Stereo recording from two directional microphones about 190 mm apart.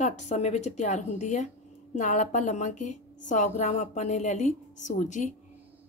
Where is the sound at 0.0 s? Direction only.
35° left (ahead or behind).